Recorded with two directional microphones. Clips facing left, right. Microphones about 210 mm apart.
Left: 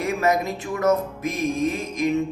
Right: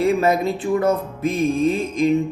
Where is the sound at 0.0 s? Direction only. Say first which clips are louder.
Right 5 dB; 30° right (ahead or behind).